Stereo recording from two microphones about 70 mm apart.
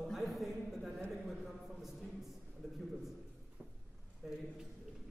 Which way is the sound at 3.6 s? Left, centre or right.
Right.